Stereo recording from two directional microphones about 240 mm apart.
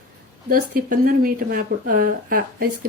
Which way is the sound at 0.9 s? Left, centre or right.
Right.